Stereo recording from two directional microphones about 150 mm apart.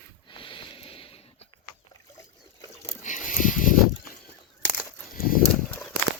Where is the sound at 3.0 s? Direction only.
55° left (ahead or behind).